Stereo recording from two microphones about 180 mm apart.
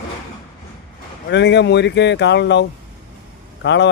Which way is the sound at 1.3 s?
75° left (ahead or behind).